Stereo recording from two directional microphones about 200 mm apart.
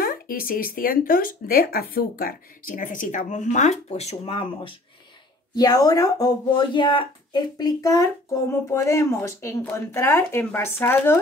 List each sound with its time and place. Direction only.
0.0 s speech: 45° left (ahead or behind); by 11.1 s 10° left (ahead or behind)